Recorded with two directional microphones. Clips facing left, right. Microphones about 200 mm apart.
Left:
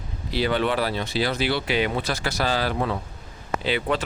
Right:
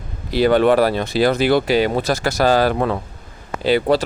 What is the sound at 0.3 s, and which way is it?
Speech, 45° right (ahead or behind).